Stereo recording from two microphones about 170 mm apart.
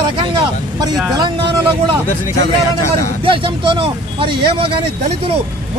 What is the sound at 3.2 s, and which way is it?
Speech, 30° right (ahead or behind).